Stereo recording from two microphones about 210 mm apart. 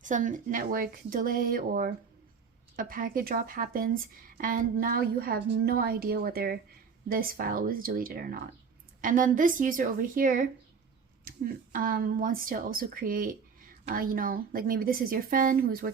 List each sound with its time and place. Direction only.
0.0 s speech: 35° right (ahead or behind)